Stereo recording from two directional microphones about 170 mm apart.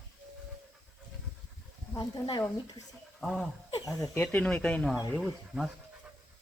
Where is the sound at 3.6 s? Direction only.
20° left (ahead or behind).